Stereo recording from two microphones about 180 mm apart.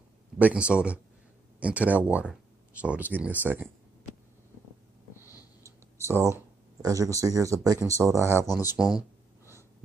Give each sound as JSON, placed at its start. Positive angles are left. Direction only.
{"t": 0.4, "sound": "speech", "side_deg": -5}
{"t": 5.2, "sound": "a sound", "side_deg": 20}
{"t": 5.6, "sound": "clicking", "side_deg": -15}
{"t": 6.3, "sound": "speech", "side_deg": -20}
{"t": 8.6, "sound": "speech", "side_deg": -5}